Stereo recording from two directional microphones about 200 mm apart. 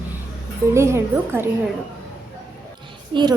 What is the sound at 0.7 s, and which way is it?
Speech, 15° right (ahead or behind).